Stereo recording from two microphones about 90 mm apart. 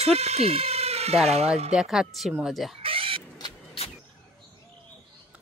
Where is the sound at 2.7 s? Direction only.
90° right.